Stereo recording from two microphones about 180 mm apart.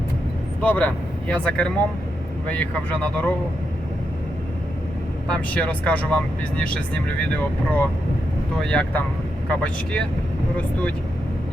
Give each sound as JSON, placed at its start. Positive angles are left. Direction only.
{"t": 0.6, "sound": "speech", "side_deg": 10}
{"t": 5.3, "sound": "speech", "side_deg": 5}